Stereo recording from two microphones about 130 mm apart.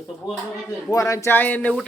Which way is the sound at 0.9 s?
25° left (ahead or behind).